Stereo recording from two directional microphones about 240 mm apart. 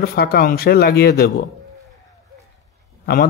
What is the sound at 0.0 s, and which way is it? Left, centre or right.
Speech, left.